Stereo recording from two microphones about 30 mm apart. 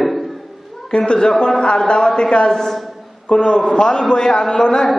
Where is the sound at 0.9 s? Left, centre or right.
Left.